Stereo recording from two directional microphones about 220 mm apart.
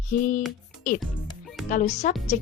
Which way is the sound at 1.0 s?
Centre (ahead or behind).